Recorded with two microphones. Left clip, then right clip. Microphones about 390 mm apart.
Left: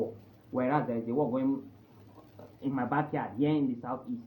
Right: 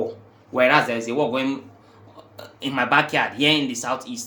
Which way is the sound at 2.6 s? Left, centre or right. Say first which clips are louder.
Right 12 dB; right.